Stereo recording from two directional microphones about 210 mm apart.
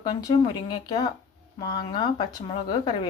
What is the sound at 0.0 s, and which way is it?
Speech, 20° left (ahead or behind).